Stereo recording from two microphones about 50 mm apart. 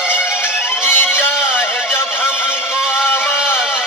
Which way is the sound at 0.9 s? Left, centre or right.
Left.